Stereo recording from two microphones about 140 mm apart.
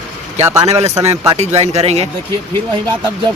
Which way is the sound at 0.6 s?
50° right (ahead or behind).